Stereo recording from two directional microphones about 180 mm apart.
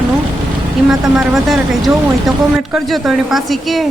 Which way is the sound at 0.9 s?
Centre (ahead or behind).